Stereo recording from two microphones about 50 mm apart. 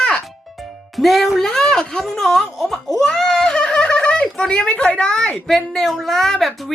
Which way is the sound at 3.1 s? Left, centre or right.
Centre.